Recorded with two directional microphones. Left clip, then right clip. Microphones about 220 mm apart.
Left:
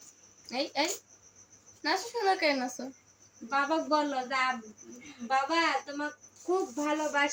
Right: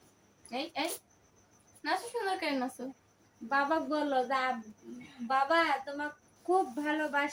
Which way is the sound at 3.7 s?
15° right (ahead or behind).